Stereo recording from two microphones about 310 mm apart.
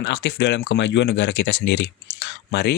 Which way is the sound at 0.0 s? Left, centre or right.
Left.